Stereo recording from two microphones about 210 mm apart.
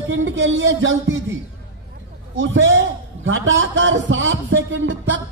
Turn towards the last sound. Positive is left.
turn(degrees=-60)  # may be behind; listen again after turning